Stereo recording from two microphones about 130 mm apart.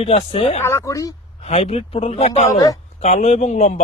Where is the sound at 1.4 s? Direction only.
50° left (ahead or behind).